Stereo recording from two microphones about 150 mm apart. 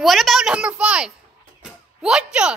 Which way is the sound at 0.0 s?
Centre (ahead or behind).